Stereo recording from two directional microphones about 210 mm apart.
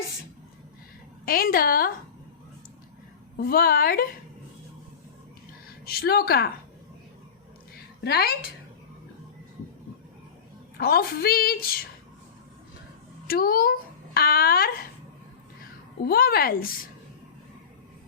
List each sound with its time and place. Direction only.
1.2 s a woman's voice: 45° left (ahead or behind)
3.3 s a woman's voice: 45° left (ahead or behind)
5.6 s a woman's voice: 45° left (ahead or behind)
8.0 s a woman's voice: 50° left (ahead or behind)
10.8 s a woman's voice: 45° left (ahead or behind)
13.2 s speech: 45° left (ahead or behind)
16.0 s a woman's voice: 45° left (ahead or behind)